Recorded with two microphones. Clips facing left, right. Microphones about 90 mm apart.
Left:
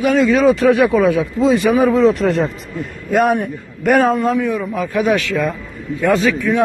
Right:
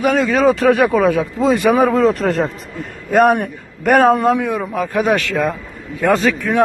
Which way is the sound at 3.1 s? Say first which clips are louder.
Right 2 dB; 60° right (ahead or behind).